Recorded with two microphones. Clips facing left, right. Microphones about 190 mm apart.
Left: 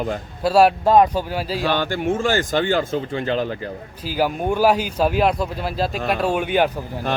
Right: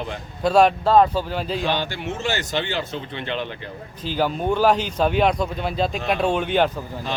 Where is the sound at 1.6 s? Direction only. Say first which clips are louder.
Left 4 dB; 50° left (ahead or behind).